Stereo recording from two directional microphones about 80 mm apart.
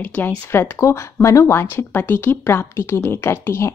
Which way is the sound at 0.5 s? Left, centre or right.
Left.